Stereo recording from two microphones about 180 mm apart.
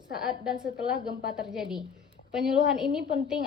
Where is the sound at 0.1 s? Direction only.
5° right (ahead or behind).